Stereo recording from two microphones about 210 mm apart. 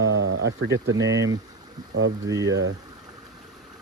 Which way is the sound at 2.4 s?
55° right (ahead or behind).